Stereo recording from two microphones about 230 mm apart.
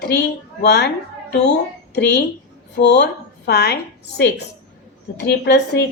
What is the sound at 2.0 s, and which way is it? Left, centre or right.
A woman's voice, left.